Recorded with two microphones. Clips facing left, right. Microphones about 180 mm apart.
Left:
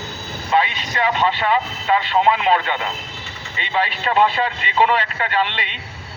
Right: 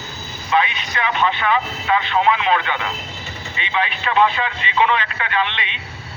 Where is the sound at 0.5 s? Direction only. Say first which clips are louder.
Even; 30° left (ahead or behind).